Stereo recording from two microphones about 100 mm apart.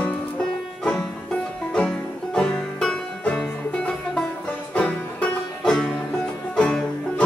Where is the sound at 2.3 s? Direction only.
10° left (ahead or behind).